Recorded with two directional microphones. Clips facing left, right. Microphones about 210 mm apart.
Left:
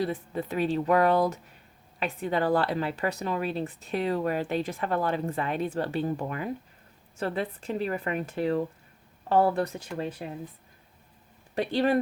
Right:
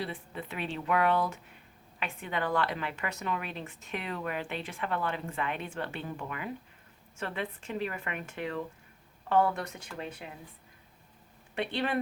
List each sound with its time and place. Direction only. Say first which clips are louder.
0.0 s a woman's voice: left 8 dB; 40° left (ahead or behind)
11.5 s a woman's voice: left 7 dB; 40° left (ahead or behind)